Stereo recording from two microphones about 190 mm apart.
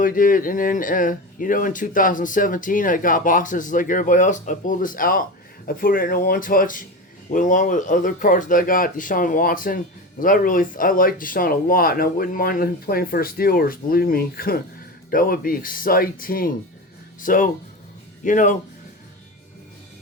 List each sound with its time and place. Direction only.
0.0 s a man's voice: 45° left (ahead or behind)